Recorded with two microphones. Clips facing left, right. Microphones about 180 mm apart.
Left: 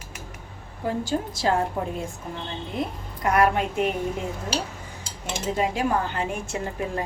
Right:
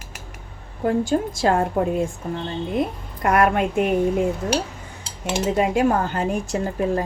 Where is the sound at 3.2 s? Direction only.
55° right (ahead or behind).